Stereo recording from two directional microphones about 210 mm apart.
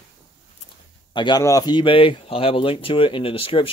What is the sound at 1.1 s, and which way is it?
Speech, 20° left (ahead or behind).